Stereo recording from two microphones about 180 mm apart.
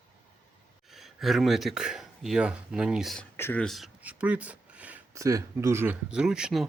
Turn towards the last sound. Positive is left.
turn(degrees=-5)  # may be behind; listen again after turning